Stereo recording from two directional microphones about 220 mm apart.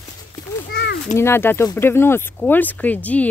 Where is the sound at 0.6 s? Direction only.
50° left (ahead or behind).